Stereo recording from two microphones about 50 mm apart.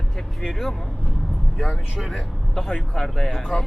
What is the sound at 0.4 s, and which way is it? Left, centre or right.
Speech, centre.